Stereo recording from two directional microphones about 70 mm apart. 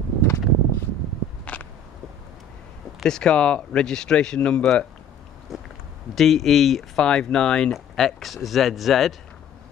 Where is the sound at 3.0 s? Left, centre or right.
Centre.